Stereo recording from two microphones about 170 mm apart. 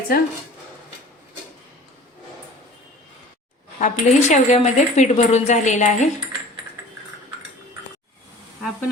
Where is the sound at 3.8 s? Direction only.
45° left (ahead or behind).